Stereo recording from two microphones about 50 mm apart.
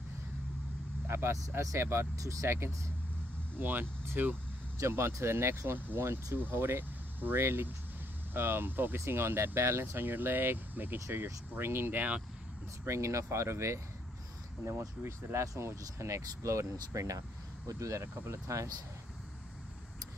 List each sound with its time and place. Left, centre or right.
1.0 s vehicle: right
1.6 s speech: right
3.5 s speech: right
4.7 s speech: right
7.3 s speech: right
9.0 s speech: right
12.8 s speech: right